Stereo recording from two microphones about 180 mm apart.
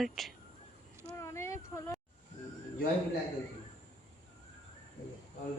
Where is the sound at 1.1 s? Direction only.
15° left (ahead or behind).